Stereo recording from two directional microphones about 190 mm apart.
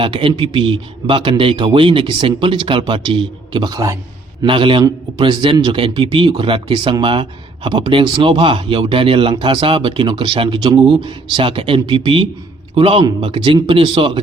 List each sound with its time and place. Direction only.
0.0 s a man's voice: 25° right (ahead or behind)